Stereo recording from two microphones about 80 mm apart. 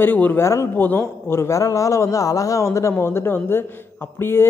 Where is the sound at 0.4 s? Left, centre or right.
Left.